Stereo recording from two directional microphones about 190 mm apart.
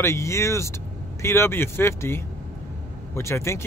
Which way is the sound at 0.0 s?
15° left (ahead or behind).